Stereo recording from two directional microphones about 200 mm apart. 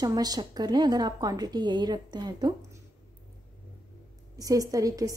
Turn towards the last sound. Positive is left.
turn(degrees=-15)  # may be behind; listen again after turning